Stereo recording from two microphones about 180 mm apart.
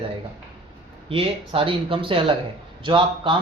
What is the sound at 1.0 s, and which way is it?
Speech, 30° right (ahead or behind).